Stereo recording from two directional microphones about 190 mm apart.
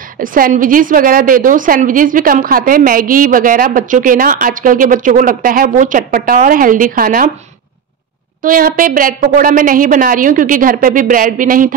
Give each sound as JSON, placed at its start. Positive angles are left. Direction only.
{"t": 0.2, "sound": "a woman's voice", "side_deg": -45}
{"t": 8.4, "sound": "a woman's voice", "side_deg": -50}